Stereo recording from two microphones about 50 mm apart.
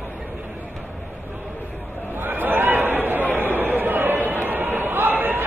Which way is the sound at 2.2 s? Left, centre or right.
Right.